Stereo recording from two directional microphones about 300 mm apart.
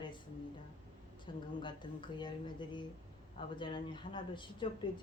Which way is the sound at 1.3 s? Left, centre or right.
Centre.